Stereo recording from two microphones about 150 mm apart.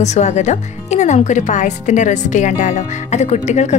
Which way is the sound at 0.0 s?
50° left (ahead or behind).